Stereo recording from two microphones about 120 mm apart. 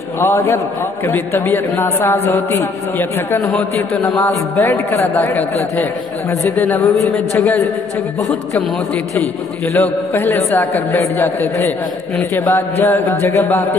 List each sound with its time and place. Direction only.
0.2 s a man's voice: 20° left (ahead or behind)
9.8 s a man's voice: 15° left (ahead or behind)